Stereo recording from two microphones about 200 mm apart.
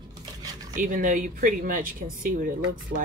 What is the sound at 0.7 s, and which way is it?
Speech, 40° right (ahead or behind).